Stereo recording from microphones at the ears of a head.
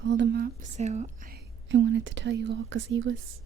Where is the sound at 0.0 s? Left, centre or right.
Right.